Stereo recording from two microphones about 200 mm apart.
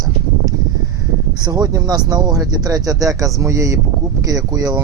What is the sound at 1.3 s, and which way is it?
Speech, 20° right (ahead or behind).